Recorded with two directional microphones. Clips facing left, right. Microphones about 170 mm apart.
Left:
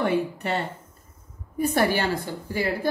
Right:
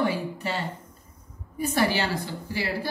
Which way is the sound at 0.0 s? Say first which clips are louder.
Left 3 dB; 60° left (ahead or behind).